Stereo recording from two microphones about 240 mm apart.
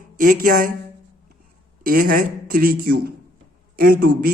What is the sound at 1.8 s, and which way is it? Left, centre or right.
Speech, right.